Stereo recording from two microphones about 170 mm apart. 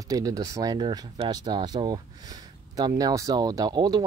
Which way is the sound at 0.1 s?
20° right (ahead or behind).